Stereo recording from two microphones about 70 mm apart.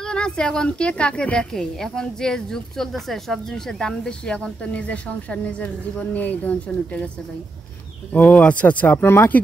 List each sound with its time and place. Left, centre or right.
0.0 s a woman's voice: centre
8.1 s speech: left